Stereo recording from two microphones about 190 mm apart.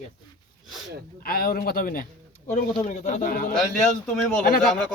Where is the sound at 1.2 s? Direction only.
50° left (ahead or behind).